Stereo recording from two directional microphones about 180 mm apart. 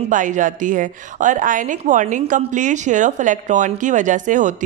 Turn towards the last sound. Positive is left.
turn(degrees=-45)  # may be behind; listen again after turning